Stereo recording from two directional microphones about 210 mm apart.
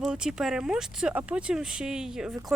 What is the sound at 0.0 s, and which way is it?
Speech, 5° right (ahead or behind).